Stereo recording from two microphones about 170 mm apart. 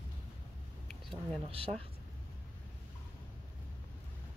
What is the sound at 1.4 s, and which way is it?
Speech, 35° right (ahead or behind).